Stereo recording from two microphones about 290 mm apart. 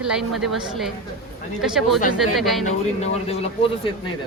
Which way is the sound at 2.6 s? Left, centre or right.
Left.